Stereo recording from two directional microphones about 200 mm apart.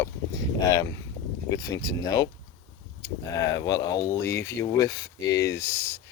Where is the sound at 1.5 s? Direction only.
20° left (ahead or behind).